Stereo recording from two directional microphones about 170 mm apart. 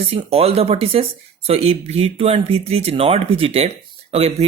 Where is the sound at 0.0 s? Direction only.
35° right (ahead or behind).